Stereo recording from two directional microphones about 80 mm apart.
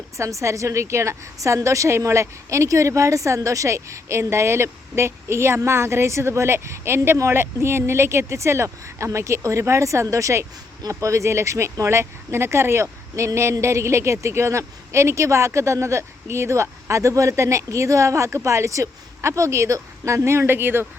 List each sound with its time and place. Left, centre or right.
0.2 s a woman's voice: right